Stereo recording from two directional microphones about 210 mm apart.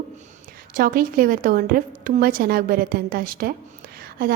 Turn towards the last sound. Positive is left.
turn(degrees=-45)  # may be behind; listen again after turning